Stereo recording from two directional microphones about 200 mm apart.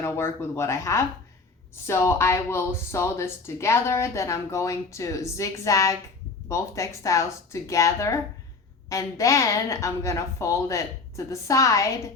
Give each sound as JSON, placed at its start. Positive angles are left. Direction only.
{"t": 0.0, "sound": "speech", "side_deg": 15}